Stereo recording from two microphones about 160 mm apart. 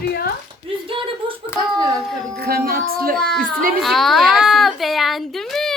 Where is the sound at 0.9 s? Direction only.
35° right (ahead or behind).